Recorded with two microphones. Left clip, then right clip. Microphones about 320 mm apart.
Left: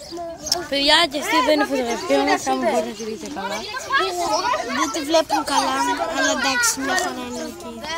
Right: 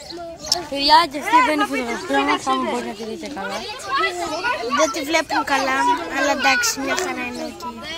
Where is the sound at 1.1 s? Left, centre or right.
Left.